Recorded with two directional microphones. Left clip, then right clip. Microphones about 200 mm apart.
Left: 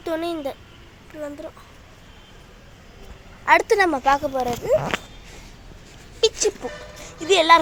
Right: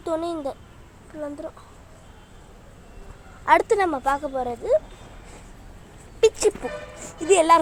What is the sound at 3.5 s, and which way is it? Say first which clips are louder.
Speech: left 1 dB; 10° right (ahead or behind).